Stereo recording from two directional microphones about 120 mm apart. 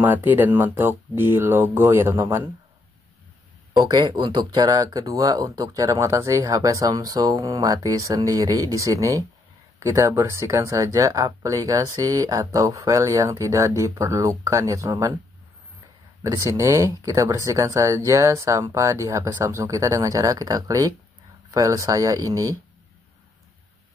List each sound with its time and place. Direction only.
0.0 s speech: 15° right (ahead or behind)
3.8 s speech: 35° right (ahead or behind)
16.2 s speech: 25° right (ahead or behind)